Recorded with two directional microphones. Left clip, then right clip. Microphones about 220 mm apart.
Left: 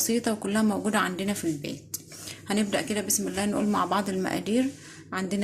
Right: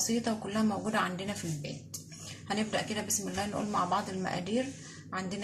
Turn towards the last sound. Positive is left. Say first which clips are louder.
# left 5 dB
turn(degrees=50)  # may be behind; listen again after turning